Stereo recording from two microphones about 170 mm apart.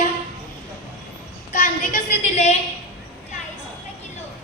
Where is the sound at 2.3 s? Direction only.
40° left (ahead or behind).